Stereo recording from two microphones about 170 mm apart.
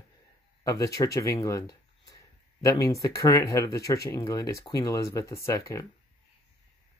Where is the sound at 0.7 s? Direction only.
20° left (ahead or behind).